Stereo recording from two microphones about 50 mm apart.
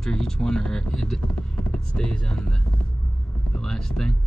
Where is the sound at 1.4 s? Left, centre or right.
Left.